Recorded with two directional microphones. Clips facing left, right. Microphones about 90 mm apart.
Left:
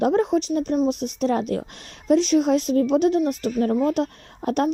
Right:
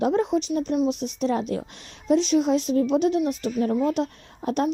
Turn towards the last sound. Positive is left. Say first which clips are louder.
# left 2 dB
turn(degrees=55)  # may be behind; listen again after turning